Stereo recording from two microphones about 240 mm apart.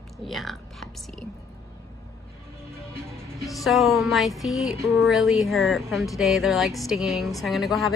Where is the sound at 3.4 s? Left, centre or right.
Centre.